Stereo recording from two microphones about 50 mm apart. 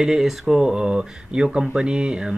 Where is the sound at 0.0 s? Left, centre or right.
Centre.